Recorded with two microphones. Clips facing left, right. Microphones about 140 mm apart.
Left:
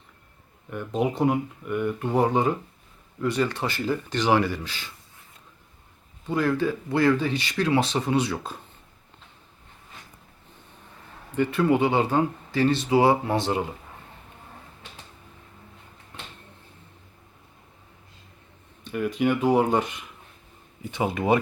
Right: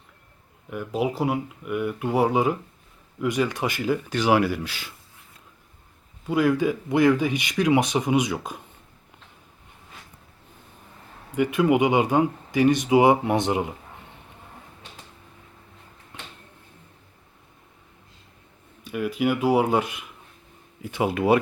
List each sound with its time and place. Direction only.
0.7 s speech: 5° right (ahead or behind)
6.2 s speech: 10° right (ahead or behind)
11.3 s speech: 15° right (ahead or behind)
18.9 s speech: 5° right (ahead or behind)